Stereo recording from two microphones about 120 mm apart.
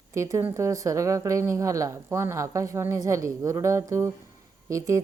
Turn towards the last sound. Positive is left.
turn(degrees=-25)  # may be behind; listen again after turning